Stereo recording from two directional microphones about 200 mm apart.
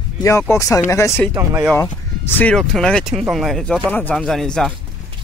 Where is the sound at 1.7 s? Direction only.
10° left (ahead or behind).